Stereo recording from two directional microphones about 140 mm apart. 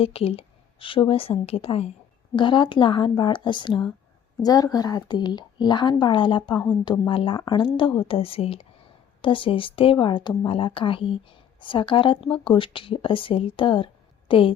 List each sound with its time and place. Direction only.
0.0 s a woman's voice: 45° left (ahead or behind)